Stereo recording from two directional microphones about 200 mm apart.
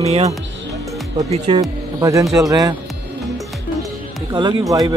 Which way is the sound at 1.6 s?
15° right (ahead or behind).